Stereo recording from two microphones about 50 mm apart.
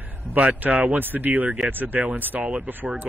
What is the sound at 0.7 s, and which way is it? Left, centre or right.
Speech, right.